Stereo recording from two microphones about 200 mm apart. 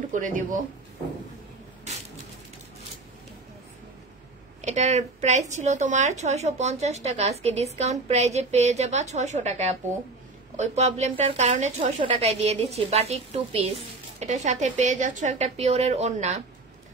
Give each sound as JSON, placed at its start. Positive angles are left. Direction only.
{"t": 0.1, "sound": "speech", "side_deg": -40}
{"t": 4.6, "sound": "speech", "side_deg": -35}